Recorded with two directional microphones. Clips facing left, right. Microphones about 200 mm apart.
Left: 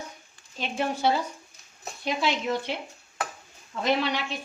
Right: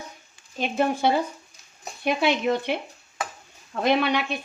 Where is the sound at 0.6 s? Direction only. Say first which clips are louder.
Right 4 dB; 55° right (ahead or behind).